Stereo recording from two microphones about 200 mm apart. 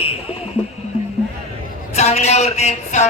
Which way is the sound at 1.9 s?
35° left (ahead or behind).